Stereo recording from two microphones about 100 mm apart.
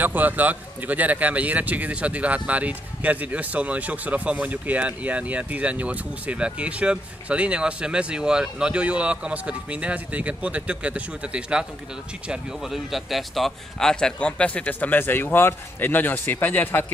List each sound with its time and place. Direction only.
0.0 s a man's voice: 20° right (ahead or behind); by 16.8 s 20° left (ahead or behind)